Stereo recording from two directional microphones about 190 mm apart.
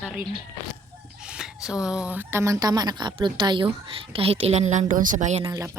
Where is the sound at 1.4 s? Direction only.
5° right (ahead or behind); by 5.4 s 40° right (ahead or behind).